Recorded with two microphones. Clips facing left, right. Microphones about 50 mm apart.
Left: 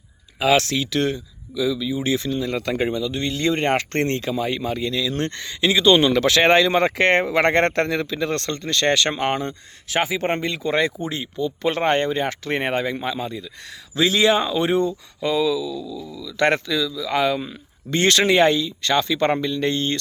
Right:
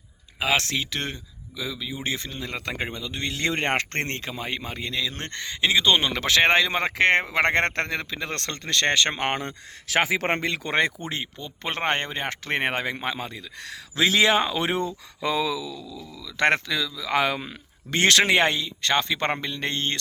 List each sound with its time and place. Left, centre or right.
0.5 s speech: right
3.2 s speech: right
3.8 s speech: right; by 7.4 s centre
7.4 s speech: right
8.4 s speech: right
8.9 s speech: right
9.1 s speech: right
9.9 s speech: right
10.7 s speech: right
14.4 s speech: right
15.2 s speech: right